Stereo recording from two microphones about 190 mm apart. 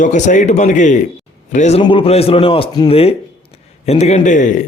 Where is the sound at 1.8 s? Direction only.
25° left (ahead or behind).